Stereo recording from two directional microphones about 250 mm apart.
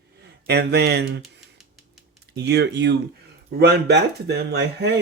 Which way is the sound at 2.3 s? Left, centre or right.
Right.